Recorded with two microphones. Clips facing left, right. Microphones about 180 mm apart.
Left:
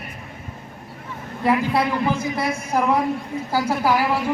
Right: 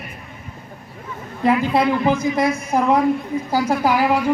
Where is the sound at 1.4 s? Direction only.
20° right (ahead or behind).